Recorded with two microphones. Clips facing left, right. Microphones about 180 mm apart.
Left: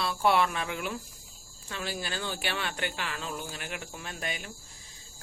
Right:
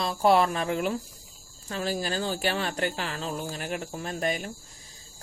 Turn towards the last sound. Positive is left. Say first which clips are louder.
# right 8 dB
turn(degrees=-40)  # may be behind; listen again after turning